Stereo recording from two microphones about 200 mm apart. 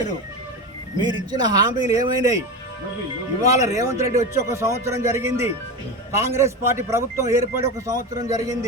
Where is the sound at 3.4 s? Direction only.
15° right (ahead or behind).